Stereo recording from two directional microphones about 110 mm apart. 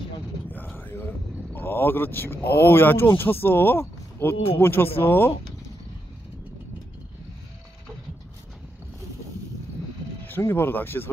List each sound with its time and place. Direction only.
0.7 s a sound: 20° left (ahead or behind)
1.5 s speech: 20° left (ahead or behind)
10.2 s speech: 20° left (ahead or behind)